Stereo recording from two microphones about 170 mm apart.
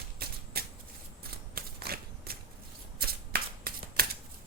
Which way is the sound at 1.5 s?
65° right (ahead or behind).